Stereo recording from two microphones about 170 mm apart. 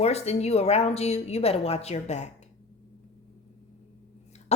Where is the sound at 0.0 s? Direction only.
40° left (ahead or behind).